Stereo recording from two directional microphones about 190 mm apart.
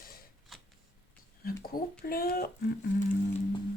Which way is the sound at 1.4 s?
50° left (ahead or behind).